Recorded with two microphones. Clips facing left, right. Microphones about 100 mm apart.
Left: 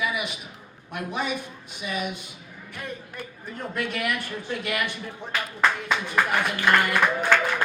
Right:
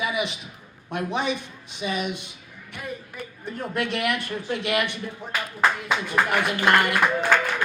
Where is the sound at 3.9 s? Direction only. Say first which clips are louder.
Right 3 dB; 20° right (ahead or behind).